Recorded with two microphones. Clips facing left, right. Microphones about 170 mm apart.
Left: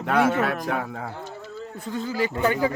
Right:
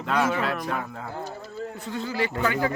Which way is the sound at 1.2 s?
40° right (ahead or behind).